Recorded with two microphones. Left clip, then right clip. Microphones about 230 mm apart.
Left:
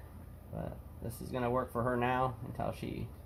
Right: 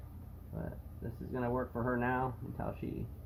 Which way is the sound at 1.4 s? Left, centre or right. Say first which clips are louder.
Left 3 dB; left.